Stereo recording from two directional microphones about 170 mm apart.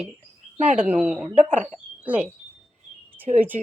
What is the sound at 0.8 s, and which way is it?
A woman's voice, 5° right (ahead or behind).